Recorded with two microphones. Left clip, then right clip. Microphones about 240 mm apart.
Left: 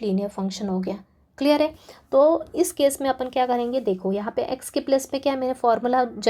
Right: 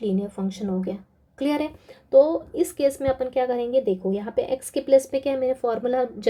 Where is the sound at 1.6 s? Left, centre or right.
Centre.